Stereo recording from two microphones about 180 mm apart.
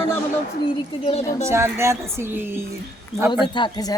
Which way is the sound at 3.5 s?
25° left (ahead or behind).